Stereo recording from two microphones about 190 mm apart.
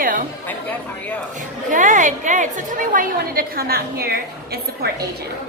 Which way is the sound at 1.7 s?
45° right (ahead or behind).